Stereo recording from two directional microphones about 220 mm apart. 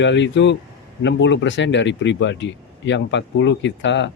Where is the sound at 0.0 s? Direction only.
55° left (ahead or behind).